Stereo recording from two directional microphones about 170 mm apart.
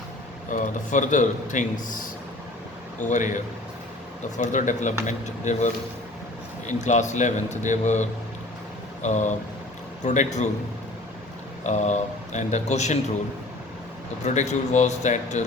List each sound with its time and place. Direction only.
0.5 s speech: 50° left (ahead or behind)
3.0 s speech: 45° left (ahead or behind)
11.6 s speech: 45° left (ahead or behind)
14.3 s speech: 45° left (ahead or behind)